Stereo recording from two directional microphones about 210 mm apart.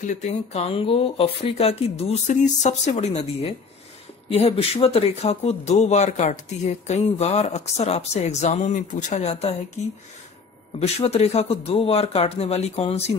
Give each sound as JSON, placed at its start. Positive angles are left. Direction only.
{"t": 0.0, "sound": "speech", "side_deg": 35}
{"t": 10.8, "sound": "speech", "side_deg": 30}